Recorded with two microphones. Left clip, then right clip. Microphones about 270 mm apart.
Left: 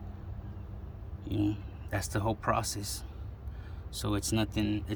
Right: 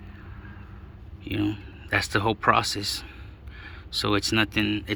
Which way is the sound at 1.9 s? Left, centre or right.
Centre.